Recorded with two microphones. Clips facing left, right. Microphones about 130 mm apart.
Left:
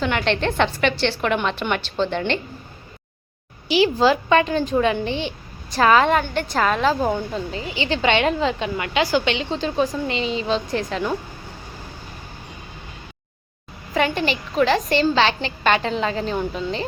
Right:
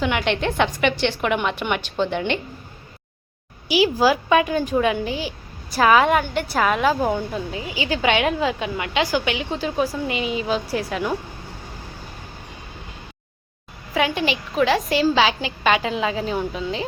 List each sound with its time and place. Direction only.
0.0 s a woman's voice: 10° right (ahead or behind)
3.7 s a woman's voice: 10° right (ahead or behind)
13.9 s a woman's voice: centre (ahead or behind)